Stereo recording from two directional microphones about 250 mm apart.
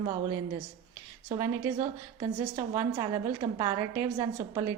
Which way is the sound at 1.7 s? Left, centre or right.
Centre.